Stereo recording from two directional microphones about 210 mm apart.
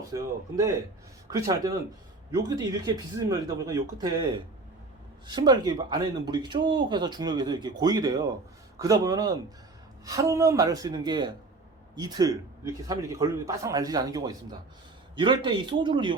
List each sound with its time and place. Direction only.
0.1 s a man's voice: 15° right (ahead or behind)